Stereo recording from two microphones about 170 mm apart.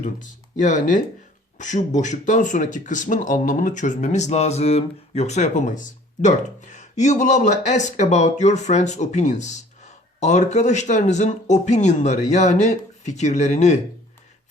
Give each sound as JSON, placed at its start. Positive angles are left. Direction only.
{"t": 0.0, "sound": "speech", "side_deg": 45}